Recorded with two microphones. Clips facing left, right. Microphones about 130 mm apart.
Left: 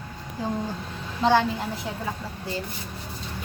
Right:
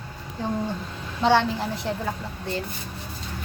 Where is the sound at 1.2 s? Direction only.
Centre (ahead or behind).